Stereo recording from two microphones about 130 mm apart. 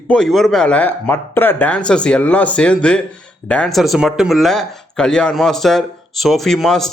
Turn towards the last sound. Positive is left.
turn(degrees=0)  # may be behind; listen again after turning